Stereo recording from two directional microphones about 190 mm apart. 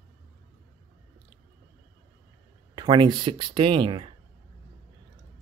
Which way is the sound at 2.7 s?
25° right (ahead or behind).